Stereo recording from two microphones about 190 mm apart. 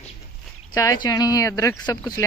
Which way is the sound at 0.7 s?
20° left (ahead or behind).